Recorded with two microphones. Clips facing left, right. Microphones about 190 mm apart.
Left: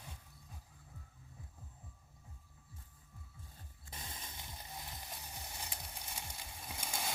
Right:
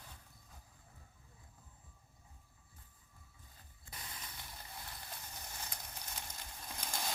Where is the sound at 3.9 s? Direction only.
25° left (ahead or behind); by 7.1 s 10° left (ahead or behind).